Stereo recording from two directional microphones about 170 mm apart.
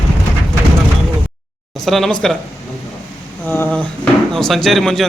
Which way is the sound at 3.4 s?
10° left (ahead or behind).